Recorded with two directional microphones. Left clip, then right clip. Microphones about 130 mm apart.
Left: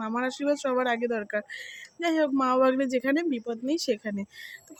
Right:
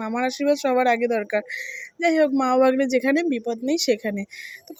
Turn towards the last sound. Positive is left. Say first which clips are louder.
# right 7 dB
turn(degrees=-35)  # may be behind; listen again after turning